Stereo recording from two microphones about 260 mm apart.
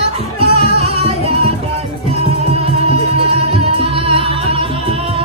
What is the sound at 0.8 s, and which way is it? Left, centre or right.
Music, right.